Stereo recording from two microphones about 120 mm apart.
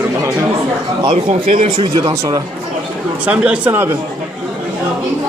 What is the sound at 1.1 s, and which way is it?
Speech, 90° right.